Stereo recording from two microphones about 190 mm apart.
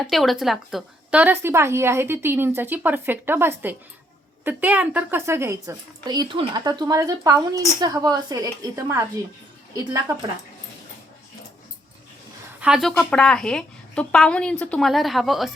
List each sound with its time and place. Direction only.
0.0 s a woman's voice: centre (ahead or behind); by 10.2 s 15° right (ahead or behind)
12.5 s a woman's voice: 5° right (ahead or behind)